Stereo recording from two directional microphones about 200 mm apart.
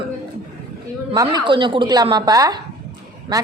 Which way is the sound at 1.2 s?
25° right (ahead or behind).